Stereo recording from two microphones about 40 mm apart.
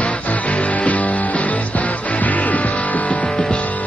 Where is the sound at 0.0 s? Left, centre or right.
Left.